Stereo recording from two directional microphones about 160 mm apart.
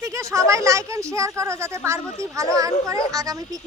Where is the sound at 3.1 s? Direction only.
20° right (ahead or behind).